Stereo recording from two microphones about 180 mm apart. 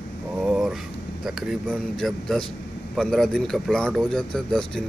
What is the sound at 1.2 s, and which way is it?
A man's voice, centre (ahead or behind).